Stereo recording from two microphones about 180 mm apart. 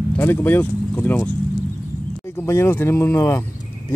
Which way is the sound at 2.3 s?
15° left (ahead or behind).